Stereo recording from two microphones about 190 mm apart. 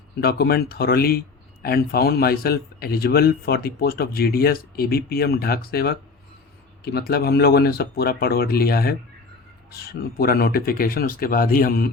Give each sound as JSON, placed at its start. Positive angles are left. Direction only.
{"t": 0.2, "sound": "a man's voice", "side_deg": 55}